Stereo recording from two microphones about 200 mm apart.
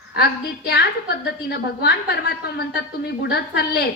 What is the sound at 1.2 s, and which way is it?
A woman's voice, 55° left (ahead or behind).